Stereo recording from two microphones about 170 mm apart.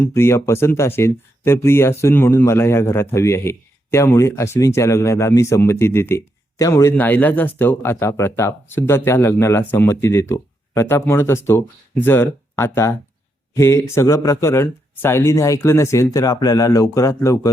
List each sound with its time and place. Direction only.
0.0 s speech: 15° left (ahead or behind)